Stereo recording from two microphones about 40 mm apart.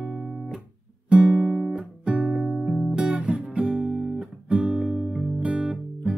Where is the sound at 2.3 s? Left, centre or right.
Centre.